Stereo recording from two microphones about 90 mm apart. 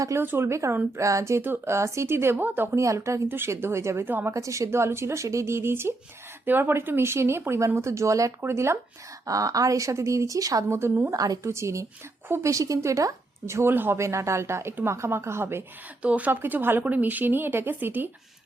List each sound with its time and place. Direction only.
0.2 s speech: 25° right (ahead or behind)
2.7 s a woman's voice: 35° right (ahead or behind)
4.4 s a woman's voice: 35° right (ahead or behind)
9.2 s a woman's voice: 40° right (ahead or behind)
11.1 s a woman's voice: 40° right (ahead or behind)
16.0 s speech: 15° right (ahead or behind)